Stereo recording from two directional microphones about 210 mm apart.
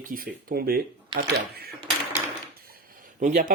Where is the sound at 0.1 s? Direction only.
40° right (ahead or behind).